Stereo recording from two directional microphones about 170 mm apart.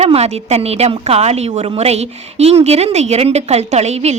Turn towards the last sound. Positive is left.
turn(degrees=-40)  # may be behind; listen again after turning